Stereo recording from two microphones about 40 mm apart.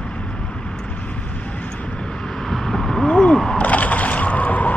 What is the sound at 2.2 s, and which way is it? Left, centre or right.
Vehicle, centre.